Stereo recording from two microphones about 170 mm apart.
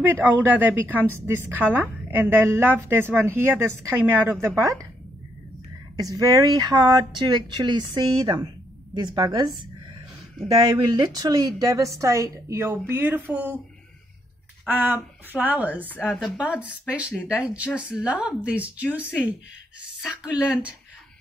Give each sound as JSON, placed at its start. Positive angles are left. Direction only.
{"t": 0.1, "sound": "a woman's voice", "side_deg": -10}
{"t": 5.9, "sound": "speech", "side_deg": -20}
{"t": 10.6, "sound": "a woman's voice", "side_deg": -20}
{"t": 14.7, "sound": "a woman's voice", "side_deg": -10}